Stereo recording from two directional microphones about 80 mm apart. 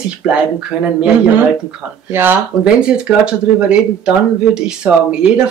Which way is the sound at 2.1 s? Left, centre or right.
Right.